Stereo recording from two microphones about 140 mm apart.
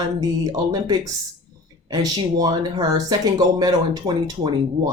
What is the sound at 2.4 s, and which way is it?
Speech, 30° right (ahead or behind).